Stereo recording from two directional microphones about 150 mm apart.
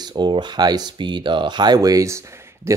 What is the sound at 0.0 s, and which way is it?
Speech, 30° right (ahead or behind).